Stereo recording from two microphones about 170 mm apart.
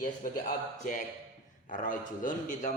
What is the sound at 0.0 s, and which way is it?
A man's voice, 50° left (ahead or behind).